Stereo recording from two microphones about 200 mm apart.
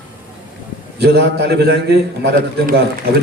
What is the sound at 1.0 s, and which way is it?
A man's voice, 55° right (ahead or behind).